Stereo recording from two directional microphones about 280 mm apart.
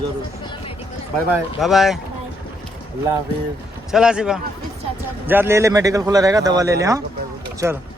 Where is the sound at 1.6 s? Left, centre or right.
Centre.